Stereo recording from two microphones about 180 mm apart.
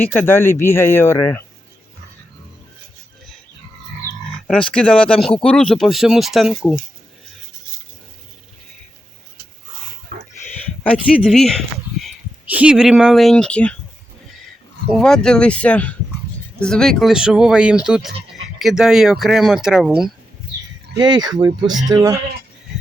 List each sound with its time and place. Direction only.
0.3 s a man's voice: 15° left (ahead or behind)
4.4 s speech: 5° left (ahead or behind)
10.8 s speech: centre (ahead or behind)
14.8 s speech: centre (ahead or behind)
20.9 s speech: 25° right (ahead or behind)